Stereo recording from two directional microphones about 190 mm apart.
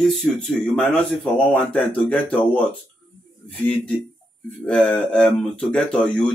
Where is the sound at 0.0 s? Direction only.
Centre (ahead or behind).